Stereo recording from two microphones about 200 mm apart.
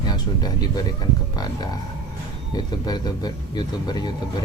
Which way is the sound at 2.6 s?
20° left (ahead or behind).